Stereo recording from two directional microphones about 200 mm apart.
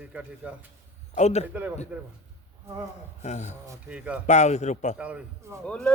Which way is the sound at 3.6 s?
5° right (ahead or behind).